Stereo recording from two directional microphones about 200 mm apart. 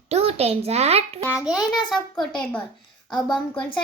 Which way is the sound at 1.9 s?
Centre (ahead or behind).